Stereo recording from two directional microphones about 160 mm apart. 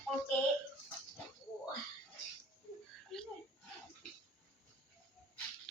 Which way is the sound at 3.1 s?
5° left (ahead or behind).